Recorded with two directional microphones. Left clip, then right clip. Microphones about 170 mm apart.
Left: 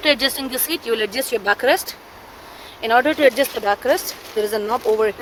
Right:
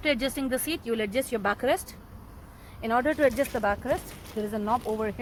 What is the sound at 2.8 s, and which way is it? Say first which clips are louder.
Speech: left 9 dB; 5° left (ahead or behind).